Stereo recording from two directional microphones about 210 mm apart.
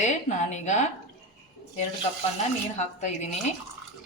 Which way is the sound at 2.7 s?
35° left (ahead or behind).